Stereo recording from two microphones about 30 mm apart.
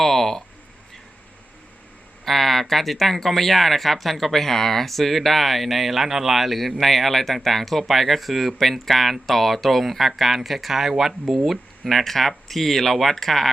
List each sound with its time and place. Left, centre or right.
0.0 s a sound: centre
2.2 s speech: centre
11.9 s speech: centre